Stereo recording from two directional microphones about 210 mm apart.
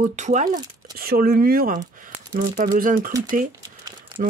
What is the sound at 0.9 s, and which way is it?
Speech, 45° right (ahead or behind).